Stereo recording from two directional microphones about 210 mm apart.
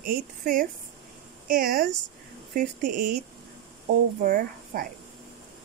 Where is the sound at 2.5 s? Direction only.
40° right (ahead or behind).